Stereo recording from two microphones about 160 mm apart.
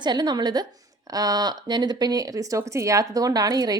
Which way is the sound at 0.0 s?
25° right (ahead or behind).